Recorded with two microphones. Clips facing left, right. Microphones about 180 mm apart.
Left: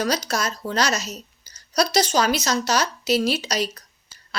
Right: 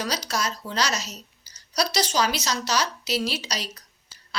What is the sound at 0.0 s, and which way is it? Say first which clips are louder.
A woman's voice: left 4 dB; 50° left (ahead or behind).